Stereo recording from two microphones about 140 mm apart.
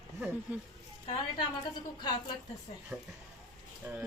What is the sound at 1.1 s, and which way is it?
A woman's voice, 30° left (ahead or behind).